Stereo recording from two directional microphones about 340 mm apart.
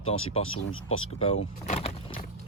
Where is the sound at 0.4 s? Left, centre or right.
Left.